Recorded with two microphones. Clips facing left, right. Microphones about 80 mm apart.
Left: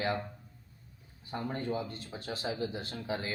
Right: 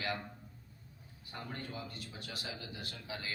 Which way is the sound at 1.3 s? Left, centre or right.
Left.